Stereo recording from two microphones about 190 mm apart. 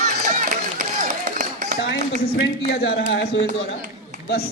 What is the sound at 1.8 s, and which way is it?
Speech, 60° left (ahead or behind).